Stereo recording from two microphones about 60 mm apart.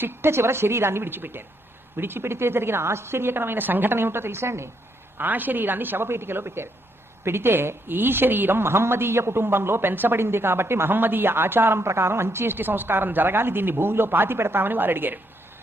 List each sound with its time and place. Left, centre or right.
0.0 s a woman's voice: right
5.1 s a woman's voice: right